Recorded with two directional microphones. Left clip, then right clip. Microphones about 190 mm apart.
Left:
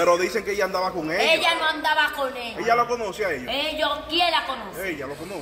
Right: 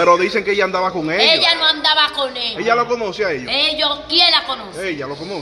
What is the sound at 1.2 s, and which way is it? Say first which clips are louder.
A woman's voice: right 6 dB; 10° left (ahead or behind).